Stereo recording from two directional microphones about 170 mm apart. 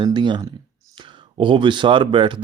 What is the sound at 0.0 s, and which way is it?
Speech, 25° right (ahead or behind).